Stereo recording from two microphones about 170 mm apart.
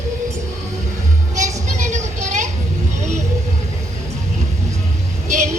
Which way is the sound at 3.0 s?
45° right (ahead or behind).